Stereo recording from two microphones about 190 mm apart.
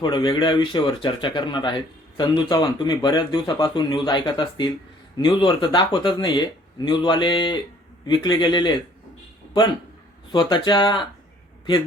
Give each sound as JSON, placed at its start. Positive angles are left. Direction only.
{"t": 0.0, "sound": "speech", "side_deg": 25}
{"t": 10.3, "sound": "speech", "side_deg": 25}